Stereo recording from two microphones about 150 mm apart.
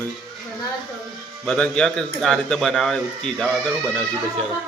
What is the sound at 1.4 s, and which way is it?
Speech, 5° left (ahead or behind).